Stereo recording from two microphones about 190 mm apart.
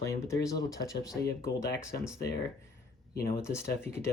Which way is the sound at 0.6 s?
Centre (ahead or behind).